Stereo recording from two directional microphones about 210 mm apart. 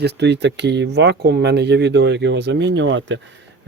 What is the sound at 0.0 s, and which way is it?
Speech, 55° right (ahead or behind).